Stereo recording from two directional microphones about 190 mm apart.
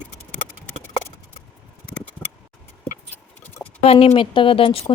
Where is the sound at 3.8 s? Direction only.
30° left (ahead or behind).